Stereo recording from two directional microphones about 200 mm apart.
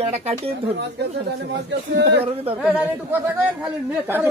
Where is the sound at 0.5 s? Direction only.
55° right (ahead or behind).